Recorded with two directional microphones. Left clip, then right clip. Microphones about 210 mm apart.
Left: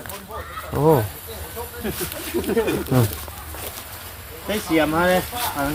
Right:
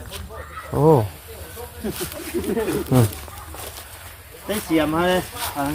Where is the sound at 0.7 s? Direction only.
25° right (ahead or behind).